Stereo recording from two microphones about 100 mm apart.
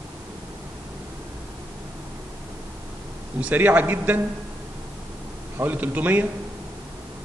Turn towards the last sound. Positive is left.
turn(degrees=-15)  # may be behind; listen again after turning